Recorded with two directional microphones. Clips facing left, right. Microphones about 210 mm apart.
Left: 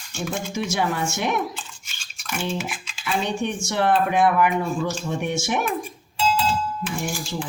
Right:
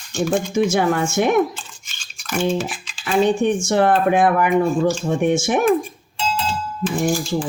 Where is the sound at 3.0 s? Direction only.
50° right (ahead or behind).